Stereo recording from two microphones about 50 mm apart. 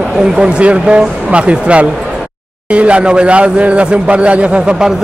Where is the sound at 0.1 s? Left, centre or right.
Centre.